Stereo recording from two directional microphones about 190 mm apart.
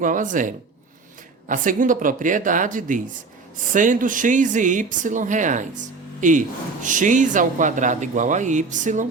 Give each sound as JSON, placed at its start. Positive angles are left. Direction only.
{"t": 0.0, "sound": "speech", "side_deg": -45}